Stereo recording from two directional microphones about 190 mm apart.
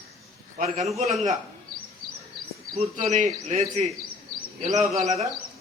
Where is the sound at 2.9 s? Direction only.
40° right (ahead or behind).